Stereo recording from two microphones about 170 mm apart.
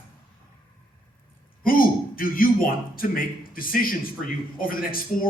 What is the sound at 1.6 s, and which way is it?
A man's voice, 55° left (ahead or behind).